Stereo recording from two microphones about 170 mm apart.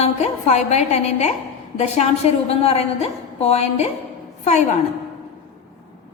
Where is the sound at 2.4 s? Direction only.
35° left (ahead or behind).